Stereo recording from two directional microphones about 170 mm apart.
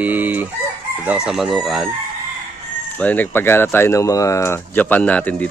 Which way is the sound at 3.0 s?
10° left (ahead or behind).